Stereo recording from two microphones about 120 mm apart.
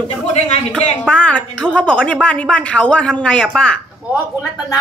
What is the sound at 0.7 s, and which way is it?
A woman's voice, 10° left (ahead or behind).